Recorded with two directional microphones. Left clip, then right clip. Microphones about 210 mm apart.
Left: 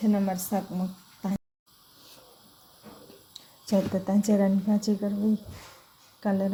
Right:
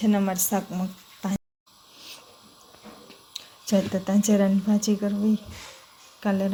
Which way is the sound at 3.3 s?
5° left (ahead or behind).